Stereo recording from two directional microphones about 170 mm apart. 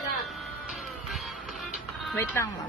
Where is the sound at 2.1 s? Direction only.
15° left (ahead or behind).